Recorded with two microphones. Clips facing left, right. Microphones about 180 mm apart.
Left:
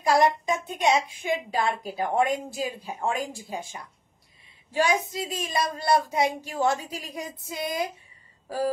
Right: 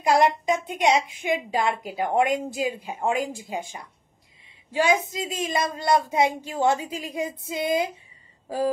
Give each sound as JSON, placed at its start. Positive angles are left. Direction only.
{"t": 0.0, "sound": "speech", "side_deg": -20}
{"t": 4.7, "sound": "speech", "side_deg": -15}